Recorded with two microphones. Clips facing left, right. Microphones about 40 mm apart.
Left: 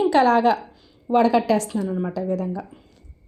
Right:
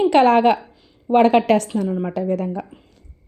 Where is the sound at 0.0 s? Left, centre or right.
Right.